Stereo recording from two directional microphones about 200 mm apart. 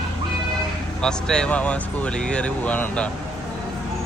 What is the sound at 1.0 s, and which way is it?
Speech, 5° left (ahead or behind).